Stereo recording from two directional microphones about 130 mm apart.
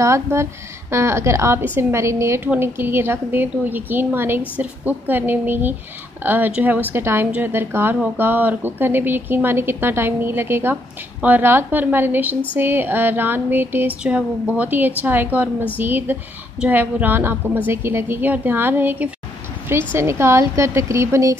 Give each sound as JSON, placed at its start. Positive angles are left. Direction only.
{"t": 0.0, "sound": "a woman's voice", "side_deg": -20}